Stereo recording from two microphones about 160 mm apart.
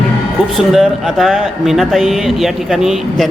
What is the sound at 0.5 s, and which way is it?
A man's voice, centre (ahead or behind).